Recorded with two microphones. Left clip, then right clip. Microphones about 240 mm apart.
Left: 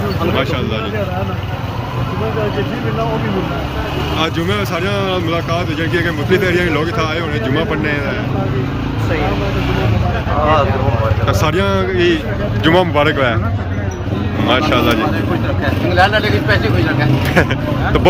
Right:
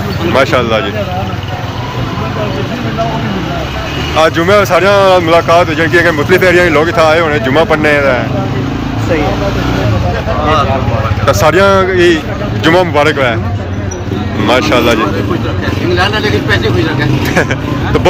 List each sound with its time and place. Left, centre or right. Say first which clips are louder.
0.3 s speech: right 9 dB; centre
4.2 s speech: right 13 dB; centre
11.3 s speech: right 11 dB; centre
14.4 s speech: right 5 dB; centre
16.0 s speech: left 1 dB; left